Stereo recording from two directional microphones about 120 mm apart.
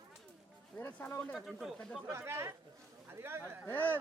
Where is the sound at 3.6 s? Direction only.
15° left (ahead or behind).